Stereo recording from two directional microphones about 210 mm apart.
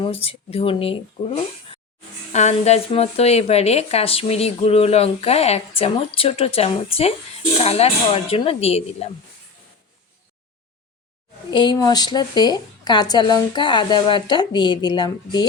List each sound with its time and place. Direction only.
0.0 s speech: 30° left (ahead or behind)
11.5 s speech: 20° left (ahead or behind)